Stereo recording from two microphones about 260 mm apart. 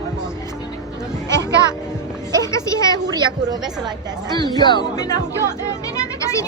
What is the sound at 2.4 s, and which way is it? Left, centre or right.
Speech, centre.